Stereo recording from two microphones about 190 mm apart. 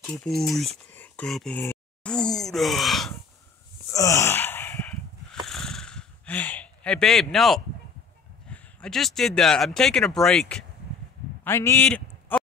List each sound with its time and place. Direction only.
0.0 s speech: 5° left (ahead or behind)
0.9 s a sound: 10° left (ahead or behind)
1.6 s speech: 10° left (ahead or behind)
3.9 s wheeze: 15° left (ahead or behind)
5.5 s a sound: centre (ahead or behind)
8.5 s a man's voice: 5° left (ahead or behind)